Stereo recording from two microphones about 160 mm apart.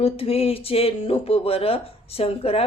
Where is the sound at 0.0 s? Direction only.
35° left (ahead or behind).